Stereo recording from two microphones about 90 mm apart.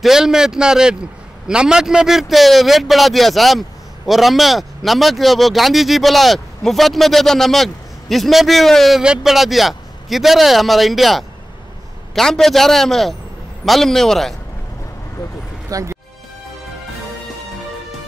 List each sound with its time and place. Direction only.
0.0 s a man's voice: 5° right (ahead or behind)
15.7 s speech: 35° right (ahead or behind)